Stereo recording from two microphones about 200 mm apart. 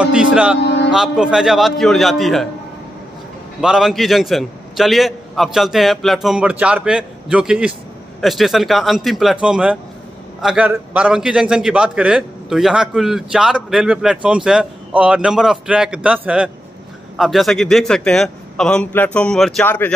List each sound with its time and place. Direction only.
0.0 s a man's voice: 5° right (ahead or behind)
0.6 s music: 60° left (ahead or behind)
0.8 s a man's voice: centre (ahead or behind)
3.6 s a man's voice: centre (ahead or behind)